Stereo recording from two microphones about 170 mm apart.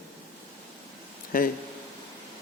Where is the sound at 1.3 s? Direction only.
55° left (ahead or behind).